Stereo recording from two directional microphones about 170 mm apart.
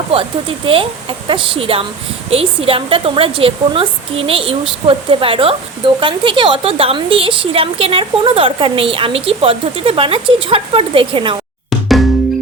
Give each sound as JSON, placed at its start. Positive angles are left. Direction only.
{"t": 0.1, "sound": "a woman's voice", "side_deg": -30}